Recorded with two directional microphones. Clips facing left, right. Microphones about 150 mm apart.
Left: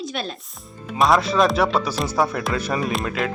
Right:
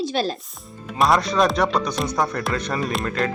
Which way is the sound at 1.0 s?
Centre (ahead or behind).